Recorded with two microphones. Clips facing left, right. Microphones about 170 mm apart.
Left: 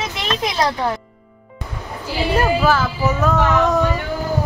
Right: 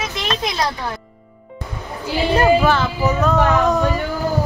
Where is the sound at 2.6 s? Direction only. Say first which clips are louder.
Even; 5° left (ahead or behind).